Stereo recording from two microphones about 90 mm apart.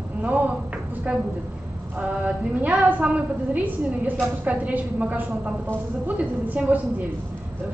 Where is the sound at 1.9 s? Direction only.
15° right (ahead or behind).